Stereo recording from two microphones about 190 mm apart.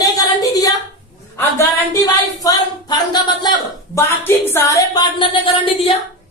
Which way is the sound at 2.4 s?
20° left (ahead or behind).